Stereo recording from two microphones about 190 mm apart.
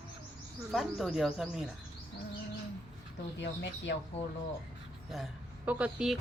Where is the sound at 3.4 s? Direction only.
70° left (ahead or behind).